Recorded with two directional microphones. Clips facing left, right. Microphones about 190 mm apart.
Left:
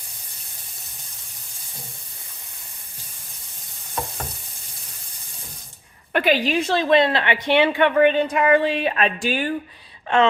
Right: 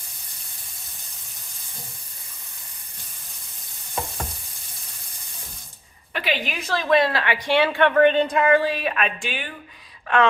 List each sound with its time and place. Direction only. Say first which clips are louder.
6.1 s a woman's voice: left 8 dB; 45° left (ahead or behind)
10.1 s a woman's voice: left 2 dB; 25° left (ahead or behind)